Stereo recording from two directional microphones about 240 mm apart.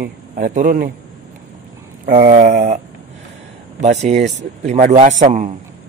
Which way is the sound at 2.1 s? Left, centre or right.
Right.